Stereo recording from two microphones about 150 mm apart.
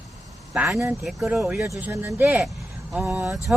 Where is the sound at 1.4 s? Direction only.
15° right (ahead or behind).